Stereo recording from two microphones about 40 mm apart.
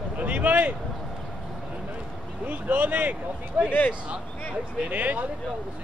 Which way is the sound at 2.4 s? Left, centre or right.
Right.